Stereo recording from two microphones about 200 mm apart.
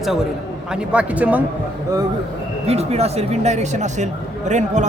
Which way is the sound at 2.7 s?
30° right (ahead or behind).